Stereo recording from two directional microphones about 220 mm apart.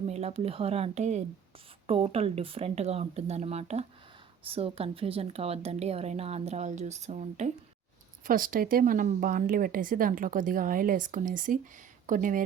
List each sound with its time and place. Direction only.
0.1 s speech: 25° right (ahead or behind)